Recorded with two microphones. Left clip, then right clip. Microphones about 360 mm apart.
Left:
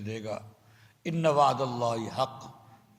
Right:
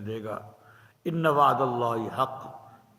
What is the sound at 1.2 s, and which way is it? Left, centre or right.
Speech, centre.